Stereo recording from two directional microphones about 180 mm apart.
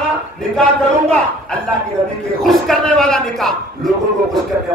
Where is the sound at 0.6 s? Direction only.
5° left (ahead or behind).